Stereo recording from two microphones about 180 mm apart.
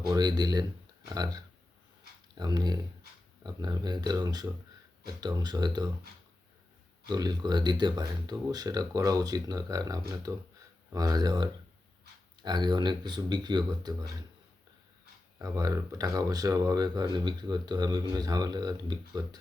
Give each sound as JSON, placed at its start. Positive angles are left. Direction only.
{"t": 0.1, "sound": "speech", "side_deg": -20}
{"t": 7.1, "sound": "speech", "side_deg": -25}
{"t": 15.4, "sound": "speech", "side_deg": -20}